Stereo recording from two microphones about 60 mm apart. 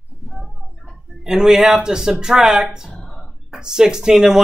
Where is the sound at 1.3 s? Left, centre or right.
Centre.